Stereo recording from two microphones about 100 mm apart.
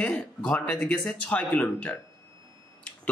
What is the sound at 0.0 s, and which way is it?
Speech, 10° left (ahead or behind).